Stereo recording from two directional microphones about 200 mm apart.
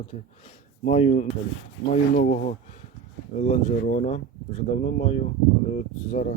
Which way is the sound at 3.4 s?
40° left (ahead or behind).